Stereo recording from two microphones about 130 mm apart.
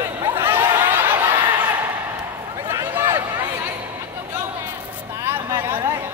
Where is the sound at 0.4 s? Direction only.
20° right (ahead or behind).